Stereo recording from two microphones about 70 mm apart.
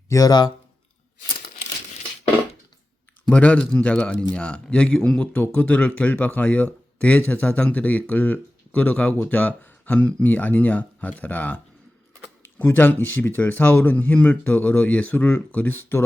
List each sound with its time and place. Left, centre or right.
0.1 s speech: left
3.2 s speech: centre